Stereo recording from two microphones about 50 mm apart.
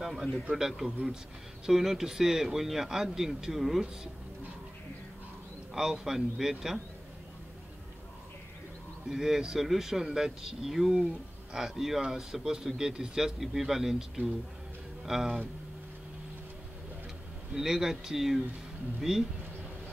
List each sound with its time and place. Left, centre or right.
0.0 s a man's voice: centre
5.8 s speech: centre
9.1 s speech: centre
17.6 s speech: centre